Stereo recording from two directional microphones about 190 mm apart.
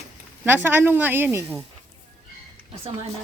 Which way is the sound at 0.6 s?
10° right (ahead or behind).